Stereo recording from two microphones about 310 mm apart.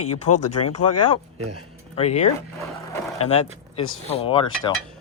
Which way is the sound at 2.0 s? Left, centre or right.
Left.